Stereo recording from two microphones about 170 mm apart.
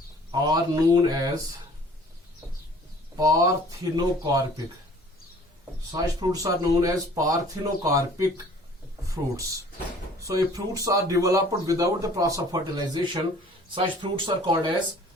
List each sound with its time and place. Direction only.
0.3 s speech: 25° right (ahead or behind)
3.2 s speech: 20° right (ahead or behind)
5.9 s speech: 20° right (ahead or behind)